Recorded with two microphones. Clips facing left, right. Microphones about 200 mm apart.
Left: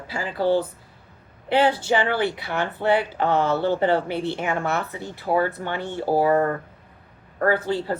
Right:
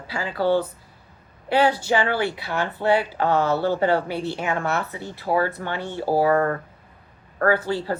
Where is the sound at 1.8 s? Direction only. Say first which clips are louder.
Even; 20° left (ahead or behind).